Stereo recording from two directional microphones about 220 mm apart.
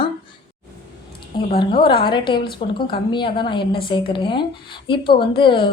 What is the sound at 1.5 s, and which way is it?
A woman's voice, 20° left (ahead or behind).